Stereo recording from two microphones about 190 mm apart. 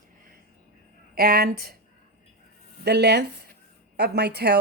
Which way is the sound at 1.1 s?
55° right (ahead or behind).